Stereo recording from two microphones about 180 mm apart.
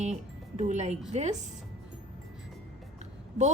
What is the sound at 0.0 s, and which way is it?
A woman's voice, 40° right (ahead or behind).